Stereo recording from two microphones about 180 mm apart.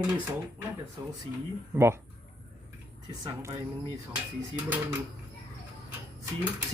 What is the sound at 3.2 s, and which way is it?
Speech, 20° right (ahead or behind).